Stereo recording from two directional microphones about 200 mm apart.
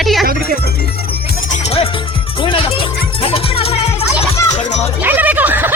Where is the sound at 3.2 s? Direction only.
30° left (ahead or behind).